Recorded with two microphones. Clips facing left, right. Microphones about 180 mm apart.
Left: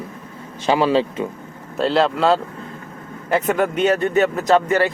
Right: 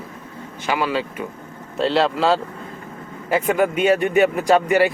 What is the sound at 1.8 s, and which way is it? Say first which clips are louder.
Speech: left 1 dB; centre (ahead or behind).